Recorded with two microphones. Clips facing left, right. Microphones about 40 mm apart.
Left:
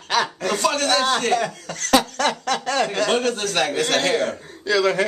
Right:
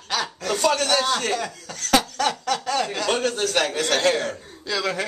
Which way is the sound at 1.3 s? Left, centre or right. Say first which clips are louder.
Left 5 dB; left.